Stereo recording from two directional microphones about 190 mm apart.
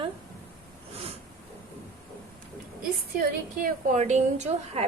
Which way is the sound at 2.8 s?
45° right (ahead or behind).